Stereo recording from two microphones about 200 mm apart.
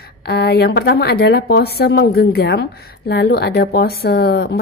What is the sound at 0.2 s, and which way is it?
Speech, 50° left (ahead or behind).